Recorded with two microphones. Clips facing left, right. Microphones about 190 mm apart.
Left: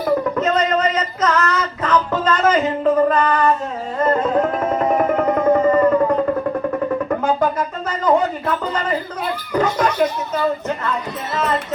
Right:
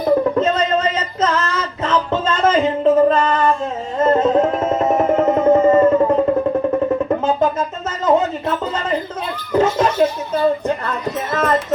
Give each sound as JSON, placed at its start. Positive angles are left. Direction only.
{"t": 0.3, "sound": "music", "side_deg": -30}
{"t": 7.3, "sound": "a sound", "side_deg": -25}
{"t": 10.8, "sound": "music", "side_deg": -50}